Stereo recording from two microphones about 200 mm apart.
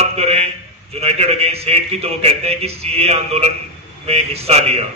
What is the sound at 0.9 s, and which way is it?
A man's voice, 30° right (ahead or behind).